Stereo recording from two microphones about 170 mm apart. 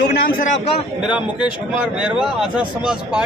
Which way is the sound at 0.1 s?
55° left (ahead or behind).